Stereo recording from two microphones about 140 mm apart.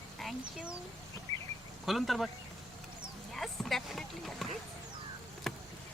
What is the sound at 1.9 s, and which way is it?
Speech, centre (ahead or behind).